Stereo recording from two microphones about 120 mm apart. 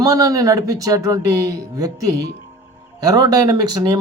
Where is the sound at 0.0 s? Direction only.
30° right (ahead or behind).